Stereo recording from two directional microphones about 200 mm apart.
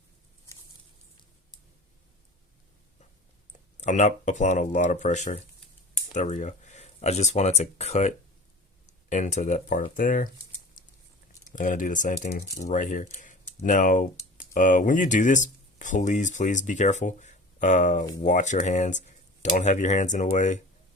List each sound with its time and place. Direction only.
3.8 s speech: 35° left (ahead or behind)
10.8 s a sound: 40° left (ahead or behind)
11.5 s speech: 40° left (ahead or behind)